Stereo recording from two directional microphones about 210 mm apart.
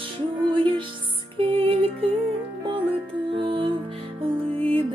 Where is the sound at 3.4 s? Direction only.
25° right (ahead or behind).